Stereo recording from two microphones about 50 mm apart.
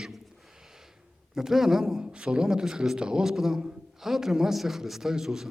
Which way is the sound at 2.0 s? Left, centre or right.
Centre.